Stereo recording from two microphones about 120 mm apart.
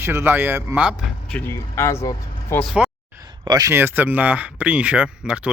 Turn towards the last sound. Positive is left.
turn(degrees=-10)  # may be behind; listen again after turning